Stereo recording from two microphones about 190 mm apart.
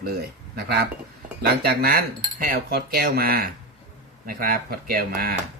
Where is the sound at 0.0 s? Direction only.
55° right (ahead or behind).